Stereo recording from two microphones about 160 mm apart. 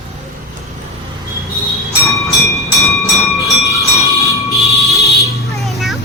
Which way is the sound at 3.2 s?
Centre (ahead or behind).